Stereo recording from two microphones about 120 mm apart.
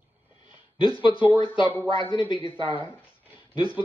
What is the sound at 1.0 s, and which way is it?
Speech, 45° left (ahead or behind).